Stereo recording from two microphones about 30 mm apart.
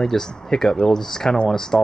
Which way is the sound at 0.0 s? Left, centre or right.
Centre.